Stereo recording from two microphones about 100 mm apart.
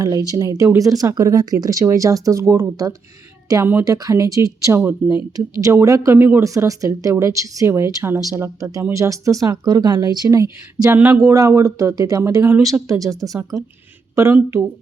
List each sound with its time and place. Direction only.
0.0 s speech: 35° right (ahead or behind)
5.0 s speech: 20° right (ahead or behind)
5.5 s speech: 35° right (ahead or behind)
10.9 s speech: 20° right (ahead or behind)
12.9 s speech: 35° right (ahead or behind)